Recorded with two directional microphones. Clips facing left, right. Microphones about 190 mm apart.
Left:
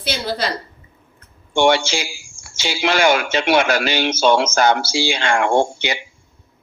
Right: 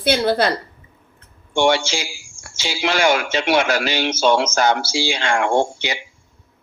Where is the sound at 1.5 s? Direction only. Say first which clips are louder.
Left 2 dB; 60° left (ahead or behind).